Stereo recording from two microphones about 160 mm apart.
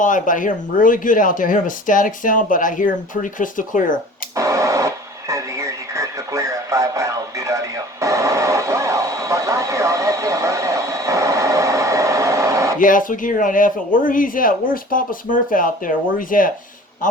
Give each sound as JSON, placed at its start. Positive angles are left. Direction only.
{"t": 0.0, "sound": "speech", "side_deg": 55}
{"t": 4.4, "sound": "radio", "side_deg": -20}
{"t": 8.0, "sound": "vehicle", "side_deg": -20}
{"t": 12.8, "sound": "speech", "side_deg": 55}